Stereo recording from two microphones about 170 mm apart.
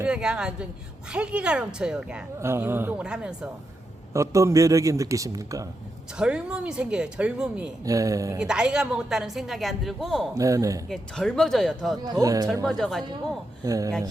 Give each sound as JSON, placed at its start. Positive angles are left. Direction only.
{"t": 0.0, "sound": "a woman's voice", "side_deg": -5}
{"t": 4.1, "sound": "a man's voice", "side_deg": -20}
{"t": 6.1, "sound": "a woman's voice", "side_deg": -5}
{"t": 7.9, "sound": "a man's voice", "side_deg": -20}
{"t": 8.4, "sound": "a woman's voice", "side_deg": -5}
{"t": 10.3, "sound": "a man's voice", "side_deg": -20}
{"t": 10.8, "sound": "a woman's voice", "side_deg": 0}
{"t": 12.2, "sound": "a man's voice", "side_deg": -20}
{"t": 12.6, "sound": "a woman's voice", "side_deg": 0}
{"t": 13.7, "sound": "a man's voice", "side_deg": -20}